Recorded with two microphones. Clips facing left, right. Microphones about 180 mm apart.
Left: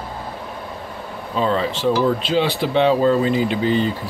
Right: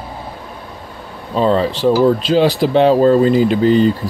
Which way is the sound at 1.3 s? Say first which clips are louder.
Right 6 dB; 35° right (ahead or behind).